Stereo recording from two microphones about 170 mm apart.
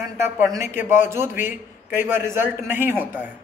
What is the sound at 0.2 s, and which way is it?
Speech, 15° right (ahead or behind).